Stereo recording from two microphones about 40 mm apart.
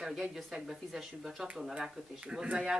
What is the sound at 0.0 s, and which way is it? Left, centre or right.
Speech, centre.